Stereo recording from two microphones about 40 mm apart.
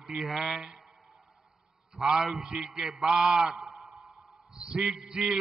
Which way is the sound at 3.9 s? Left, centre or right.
Right.